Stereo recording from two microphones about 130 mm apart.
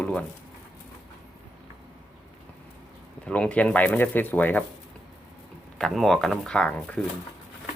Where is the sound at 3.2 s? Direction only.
10° left (ahead or behind).